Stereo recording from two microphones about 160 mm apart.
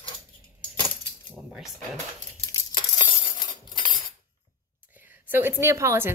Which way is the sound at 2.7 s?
30° left (ahead or behind).